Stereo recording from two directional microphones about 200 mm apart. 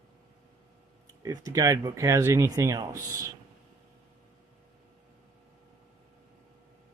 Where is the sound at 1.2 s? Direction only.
15° right (ahead or behind).